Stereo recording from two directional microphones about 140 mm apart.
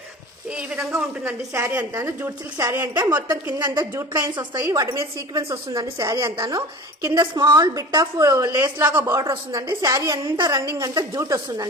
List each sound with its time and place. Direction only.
0.5 s a woman's voice: 5° right (ahead or behind); by 3.2 s 30° right (ahead or behind)
3.2 s a woman's voice: 10° right (ahead or behind)
3.9 s a woman's voice: 25° right (ahead or behind)